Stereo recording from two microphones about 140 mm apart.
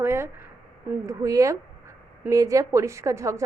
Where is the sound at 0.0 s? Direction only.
20° right (ahead or behind).